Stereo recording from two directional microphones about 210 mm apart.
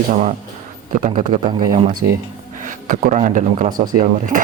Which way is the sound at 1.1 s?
25° right (ahead or behind).